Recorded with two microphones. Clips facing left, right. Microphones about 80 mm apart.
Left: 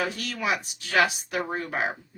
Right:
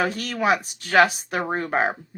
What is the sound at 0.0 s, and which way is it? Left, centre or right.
Speech, right.